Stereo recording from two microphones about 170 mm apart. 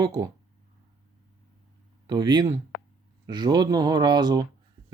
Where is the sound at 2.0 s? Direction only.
25° right (ahead or behind).